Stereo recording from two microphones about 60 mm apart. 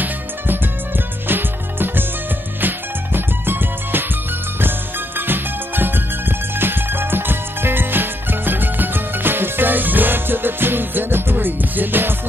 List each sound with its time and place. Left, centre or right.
1.2 s music: right